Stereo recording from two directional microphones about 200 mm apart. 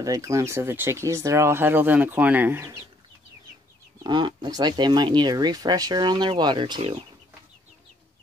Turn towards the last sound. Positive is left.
turn(degrees=-25)  # may be behind; listen again after turning